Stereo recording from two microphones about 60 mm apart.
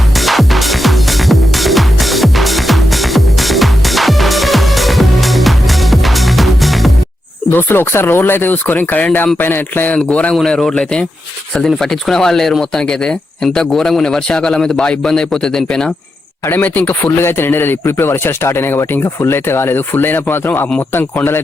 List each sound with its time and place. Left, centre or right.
0.2 s music: centre
7.5 s speech: left
9.4 s speech: left
10.6 s speech: centre
16.5 s speech: left